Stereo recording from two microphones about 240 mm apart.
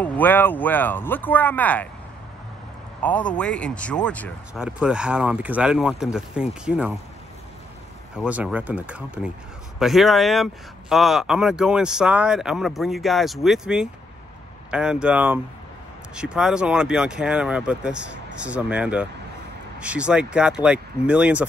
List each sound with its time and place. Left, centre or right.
0.0 s speech: centre
3.0 s speech: centre
8.2 s speech: centre